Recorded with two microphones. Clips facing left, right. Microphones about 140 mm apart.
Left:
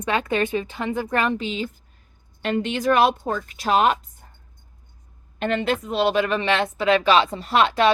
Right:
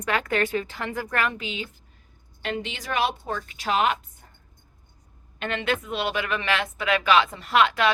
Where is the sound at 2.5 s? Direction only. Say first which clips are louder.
Left 10 dB; 50° left (ahead or behind).